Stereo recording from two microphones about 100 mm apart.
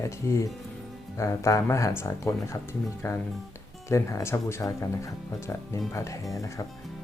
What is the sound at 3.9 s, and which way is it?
Speech, 30° left (ahead or behind).